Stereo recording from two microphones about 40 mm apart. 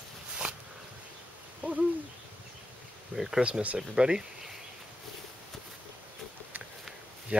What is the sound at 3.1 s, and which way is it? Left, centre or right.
Speech, centre.